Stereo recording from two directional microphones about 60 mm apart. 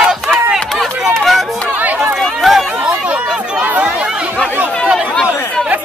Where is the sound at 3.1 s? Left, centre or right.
Right.